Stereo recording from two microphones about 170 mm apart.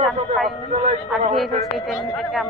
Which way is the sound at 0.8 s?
40° right (ahead or behind).